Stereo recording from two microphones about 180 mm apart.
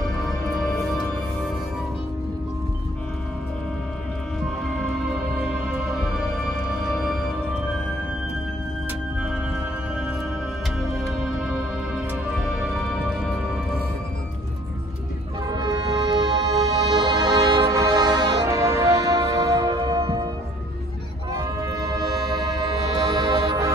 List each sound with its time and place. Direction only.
0.3 s music: centre (ahead or behind)
4.6 s music: centre (ahead or behind)
10.8 s music: centre (ahead or behind)
15.4 s music: 20° right (ahead or behind)
21.3 s music: 20° right (ahead or behind)